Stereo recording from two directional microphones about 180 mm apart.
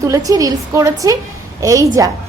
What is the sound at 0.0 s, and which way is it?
A woman's voice, 20° right (ahead or behind).